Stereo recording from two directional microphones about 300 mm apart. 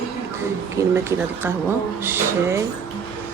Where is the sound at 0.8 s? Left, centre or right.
Centre.